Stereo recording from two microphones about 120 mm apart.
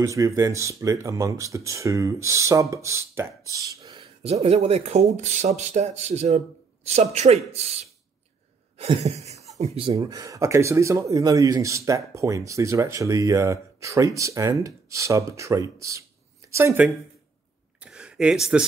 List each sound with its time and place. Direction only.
0.0 s speech: 25° right (ahead or behind)
4.0 s speech: 60° right (ahead or behind)
9.6 s speech: 50° right (ahead or behind)
9.9 s speech: 30° right (ahead or behind)
17.7 s a sound: 5° right (ahead or behind)